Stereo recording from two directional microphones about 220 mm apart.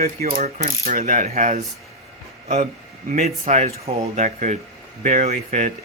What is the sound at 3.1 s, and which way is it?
Speech, 30° right (ahead or behind).